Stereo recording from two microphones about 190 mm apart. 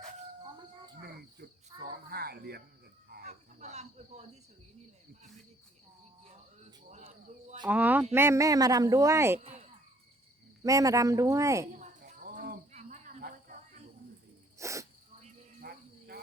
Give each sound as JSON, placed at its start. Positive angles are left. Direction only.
{"t": 1.0, "sound": "cricket", "side_deg": -55}
{"t": 3.2, "sound": "cricket", "side_deg": -35}
{"t": 6.9, "sound": "a sound", "side_deg": -40}
{"t": 7.7, "sound": "speech", "side_deg": -10}
{"t": 9.4, "sound": "a sound", "side_deg": -35}
{"t": 10.6, "sound": "speech", "side_deg": -15}
{"t": 11.7, "sound": "cricket", "side_deg": -40}
{"t": 14.6, "sound": "sneeze", "side_deg": -15}
{"t": 15.6, "sound": "cricket", "side_deg": -55}